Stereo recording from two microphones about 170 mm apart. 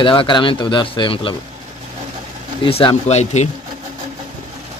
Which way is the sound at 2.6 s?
30° left (ahead or behind).